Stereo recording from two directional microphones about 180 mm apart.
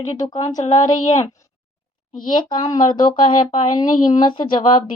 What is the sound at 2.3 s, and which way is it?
Speech, 25° left (ahead or behind).